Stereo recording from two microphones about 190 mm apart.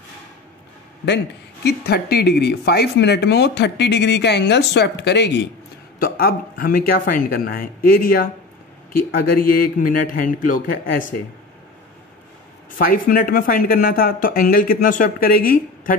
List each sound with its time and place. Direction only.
1.0 s speech: 60° left (ahead or behind)
5.9 s speech: 50° left (ahead or behind)
12.7 s speech: 50° left (ahead or behind)